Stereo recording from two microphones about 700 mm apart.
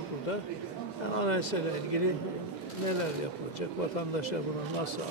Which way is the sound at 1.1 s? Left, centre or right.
Left.